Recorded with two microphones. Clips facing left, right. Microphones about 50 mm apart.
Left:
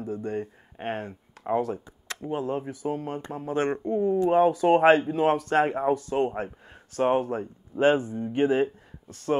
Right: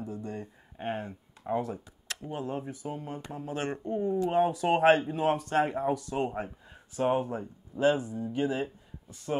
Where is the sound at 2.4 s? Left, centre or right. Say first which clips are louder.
Left 3 dB; left.